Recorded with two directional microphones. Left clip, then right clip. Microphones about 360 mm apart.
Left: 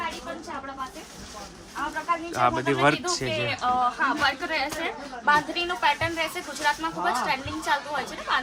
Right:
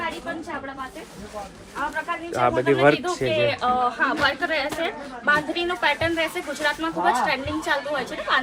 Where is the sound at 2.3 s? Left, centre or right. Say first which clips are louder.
Right 5 dB; centre.